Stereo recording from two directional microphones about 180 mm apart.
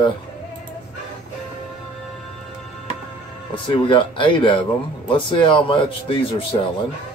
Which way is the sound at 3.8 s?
25° left (ahead or behind).